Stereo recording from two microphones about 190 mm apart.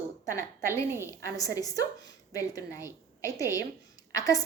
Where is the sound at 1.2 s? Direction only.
15° left (ahead or behind).